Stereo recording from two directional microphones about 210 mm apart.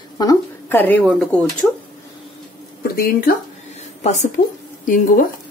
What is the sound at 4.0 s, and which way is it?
Speech, 35° left (ahead or behind).